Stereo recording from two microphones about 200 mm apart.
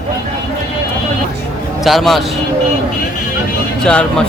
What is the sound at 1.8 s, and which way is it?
Speech, centre (ahead or behind).